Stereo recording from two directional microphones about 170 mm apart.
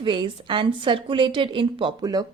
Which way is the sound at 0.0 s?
30° right (ahead or behind).